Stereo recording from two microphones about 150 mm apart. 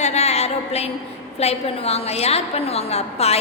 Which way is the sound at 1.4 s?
45° left (ahead or behind).